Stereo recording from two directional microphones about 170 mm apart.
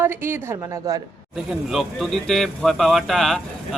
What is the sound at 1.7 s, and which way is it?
A man's voice, centre (ahead or behind).